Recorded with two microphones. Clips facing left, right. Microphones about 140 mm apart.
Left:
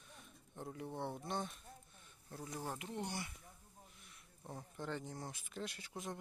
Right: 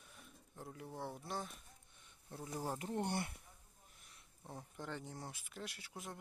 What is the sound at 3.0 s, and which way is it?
Speech, 55° right (ahead or behind).